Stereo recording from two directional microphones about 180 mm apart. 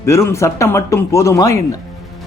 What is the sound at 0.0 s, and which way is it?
A man's voice, 15° left (ahead or behind).